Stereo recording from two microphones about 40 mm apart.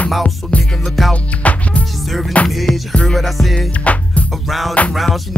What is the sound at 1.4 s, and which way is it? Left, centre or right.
Music, left.